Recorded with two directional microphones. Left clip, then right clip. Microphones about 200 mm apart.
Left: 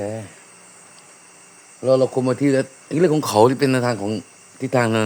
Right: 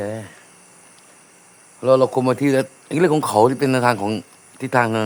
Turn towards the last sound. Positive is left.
turn(degrees=20)  # may be behind; listen again after turning